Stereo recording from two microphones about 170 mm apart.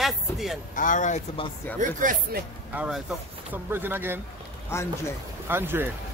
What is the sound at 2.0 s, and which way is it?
Speech, 55° right (ahead or behind).